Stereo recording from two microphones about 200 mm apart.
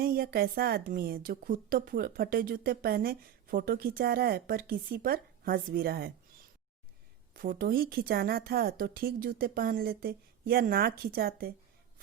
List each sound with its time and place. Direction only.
0.0 s a woman's voice: 50° right (ahead or behind)
7.3 s a woman's voice: 45° right (ahead or behind)